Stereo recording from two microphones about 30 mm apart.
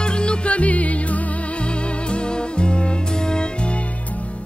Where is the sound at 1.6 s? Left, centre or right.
Left.